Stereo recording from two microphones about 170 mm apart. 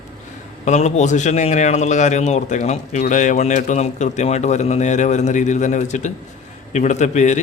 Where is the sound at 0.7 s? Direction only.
40° left (ahead or behind).